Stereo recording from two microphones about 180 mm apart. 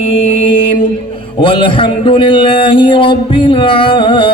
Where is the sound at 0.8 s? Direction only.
30° left (ahead or behind).